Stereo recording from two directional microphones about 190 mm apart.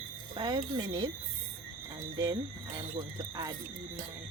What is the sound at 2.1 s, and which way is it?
Speech, 20° right (ahead or behind).